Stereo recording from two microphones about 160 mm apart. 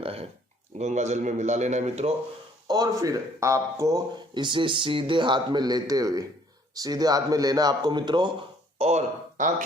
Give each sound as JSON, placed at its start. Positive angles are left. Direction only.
{"t": 0.0, "sound": "a sound", "side_deg": -40}
{"t": 0.8, "sound": "speech", "side_deg": -45}
{"t": 2.6, "sound": "a man's voice", "side_deg": -25}
{"t": 8.8, "sound": "speech", "side_deg": -45}